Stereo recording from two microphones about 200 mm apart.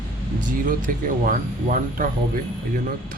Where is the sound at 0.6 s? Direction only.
40° right (ahead or behind).